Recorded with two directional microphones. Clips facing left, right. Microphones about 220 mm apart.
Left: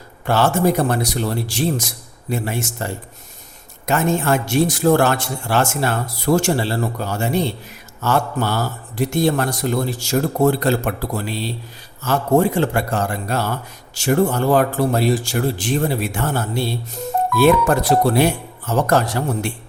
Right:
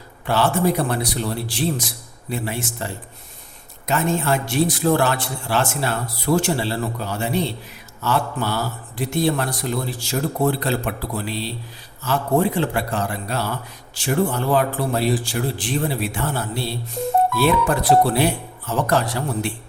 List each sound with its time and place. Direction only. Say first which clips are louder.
0.3 s a man's voice: left 3 dB; 45° left (ahead or behind)